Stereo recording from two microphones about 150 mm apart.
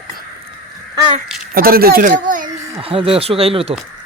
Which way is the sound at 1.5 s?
80° right.